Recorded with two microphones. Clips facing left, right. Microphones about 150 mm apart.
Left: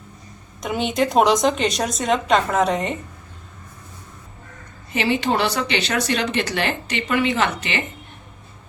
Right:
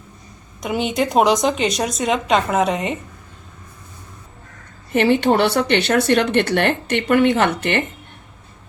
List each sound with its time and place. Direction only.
0.6 s a woman's voice: centre (ahead or behind)
4.9 s speech: 60° right (ahead or behind)